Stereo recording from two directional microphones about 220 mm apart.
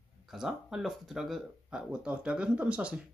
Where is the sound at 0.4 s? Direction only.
Centre (ahead or behind).